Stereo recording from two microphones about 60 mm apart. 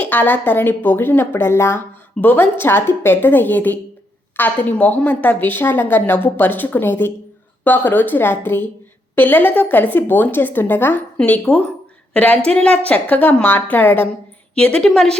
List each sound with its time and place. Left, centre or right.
0.0 s a woman's voice: left
2.2 s a woman's voice: left
14.5 s a woman's voice: centre